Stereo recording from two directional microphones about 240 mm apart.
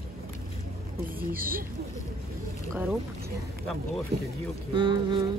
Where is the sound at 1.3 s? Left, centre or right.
Right.